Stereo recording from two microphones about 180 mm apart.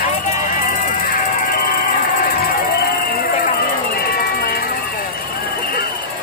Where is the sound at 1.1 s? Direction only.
50° left (ahead or behind).